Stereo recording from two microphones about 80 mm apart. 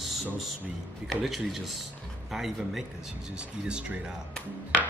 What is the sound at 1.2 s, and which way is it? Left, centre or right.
A man's voice, centre.